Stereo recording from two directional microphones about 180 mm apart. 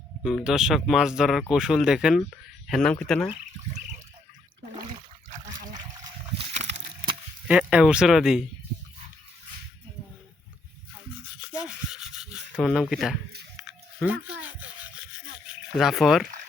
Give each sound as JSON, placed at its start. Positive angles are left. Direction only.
{"t": 0.2, "sound": "speech", "side_deg": 0}
{"t": 6.3, "sound": "a sound", "side_deg": -40}
{"t": 7.4, "sound": "speech", "side_deg": -5}
{"t": 11.3, "sound": "rub", "side_deg": -5}
{"t": 13.6, "sound": "biting", "side_deg": -5}
{"t": 15.8, "sound": "speech", "side_deg": 0}